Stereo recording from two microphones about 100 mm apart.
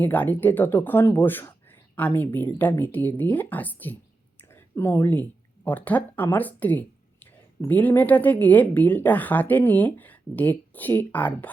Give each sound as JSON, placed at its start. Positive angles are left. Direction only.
{"t": 0.0, "sound": "speech", "side_deg": 15}